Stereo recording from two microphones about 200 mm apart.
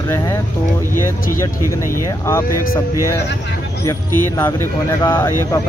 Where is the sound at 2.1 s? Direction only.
15° left (ahead or behind).